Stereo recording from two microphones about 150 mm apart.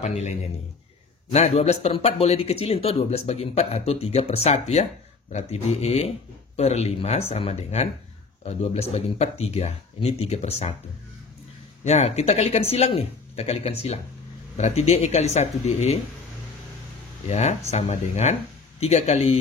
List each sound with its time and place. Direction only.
0.0 s speech: 50° left (ahead or behind)
11.8 s speech: 45° left (ahead or behind)
17.3 s speech: 45° left (ahead or behind)